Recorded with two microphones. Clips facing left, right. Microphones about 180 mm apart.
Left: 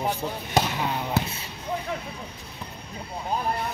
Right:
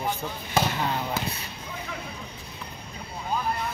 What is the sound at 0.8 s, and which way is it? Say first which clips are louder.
Speech: even; 10° left (ahead or behind).